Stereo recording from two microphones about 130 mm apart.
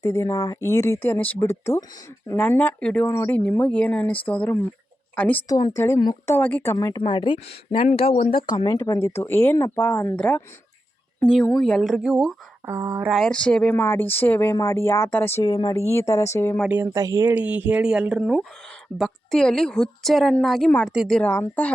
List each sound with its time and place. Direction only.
0.0 s speech: 20° left (ahead or behind)
5.5 s speech: 35° left (ahead or behind)
5.7 s speech: 20° left (ahead or behind)
6.7 s speech: 30° left (ahead or behind)
7.9 s speech: 50° left (ahead or behind)
8.4 s speech: 30° left (ahead or behind); by 11.4 s 10° left (ahead or behind)
11.5 s speech: centre (ahead or behind)
12.6 s speech: 20° right (ahead or behind)
13.1 s speech: centre (ahead or behind)
15.4 s speech: 25° left (ahead or behind)
16.6 s speech: 15° right (ahead or behind)
16.9 s speech: 25° right (ahead or behind)
17.2 s speech: 10° right (ahead or behind)
21.2 s speech: 10° left (ahead or behind)